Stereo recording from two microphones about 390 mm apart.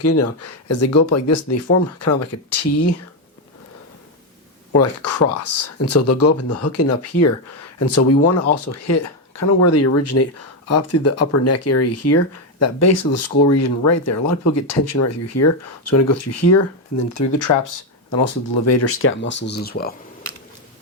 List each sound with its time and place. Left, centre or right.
0.0 s speech: left
4.7 s speech: left